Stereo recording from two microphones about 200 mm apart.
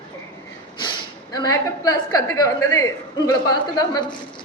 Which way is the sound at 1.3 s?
20° left (ahead or behind).